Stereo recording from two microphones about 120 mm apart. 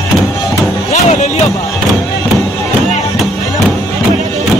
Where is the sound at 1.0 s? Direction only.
65° left (ahead or behind).